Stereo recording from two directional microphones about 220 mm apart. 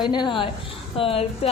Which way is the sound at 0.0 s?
20° left (ahead or behind).